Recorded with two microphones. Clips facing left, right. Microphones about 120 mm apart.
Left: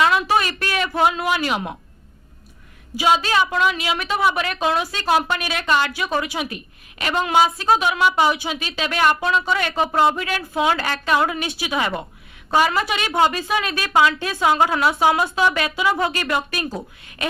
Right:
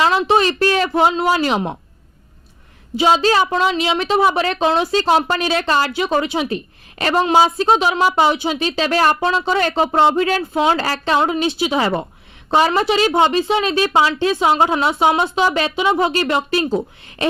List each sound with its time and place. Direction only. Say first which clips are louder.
0.0 s a woman's voice: right 3 dB; 30° right (ahead or behind)
2.9 s a woman's voice: right 4 dB; 30° right (ahead or behind)